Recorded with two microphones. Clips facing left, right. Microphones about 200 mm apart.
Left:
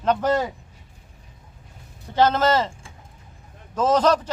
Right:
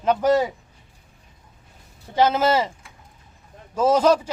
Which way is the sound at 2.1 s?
10° right (ahead or behind).